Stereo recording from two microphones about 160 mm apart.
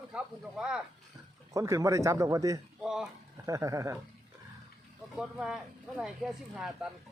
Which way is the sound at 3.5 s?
20° right (ahead or behind).